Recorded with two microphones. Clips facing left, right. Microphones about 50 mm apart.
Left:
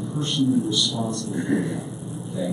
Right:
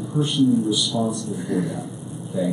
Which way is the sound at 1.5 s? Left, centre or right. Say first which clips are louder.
Even; left.